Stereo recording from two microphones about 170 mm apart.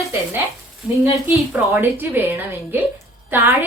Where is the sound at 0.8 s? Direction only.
5° right (ahead or behind).